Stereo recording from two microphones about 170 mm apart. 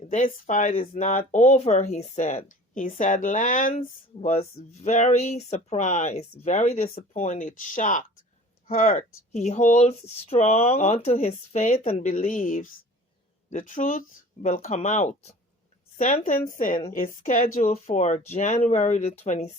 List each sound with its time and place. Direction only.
0.1 s speech: 50° left (ahead or behind)
16.0 s speech: 50° left (ahead or behind)